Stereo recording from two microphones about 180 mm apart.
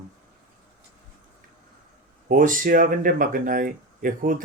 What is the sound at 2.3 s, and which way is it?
Speech, 50° right (ahead or behind).